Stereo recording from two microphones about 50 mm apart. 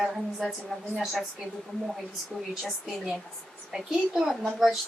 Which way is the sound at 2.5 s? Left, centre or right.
Centre.